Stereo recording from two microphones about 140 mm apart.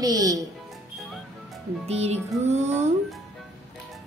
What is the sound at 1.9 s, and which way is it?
Music, 50° right (ahead or behind).